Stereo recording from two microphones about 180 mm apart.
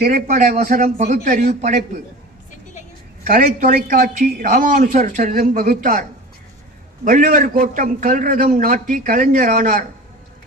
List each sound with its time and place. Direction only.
0.0 s a man's voice: 50° right (ahead or behind)
3.2 s a man's voice: 50° right (ahead or behind)